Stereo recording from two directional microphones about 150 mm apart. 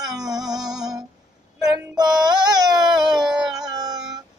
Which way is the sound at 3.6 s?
25° right (ahead or behind).